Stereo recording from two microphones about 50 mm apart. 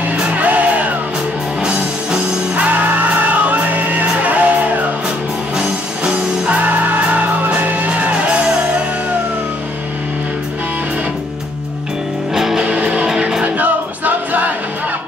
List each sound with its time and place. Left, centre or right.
0.0 s music: right
1.6 s music: centre
2.5 s music: right
12.4 s music: centre
12.6 s music: right
13.1 s music: centre
13.4 s music: right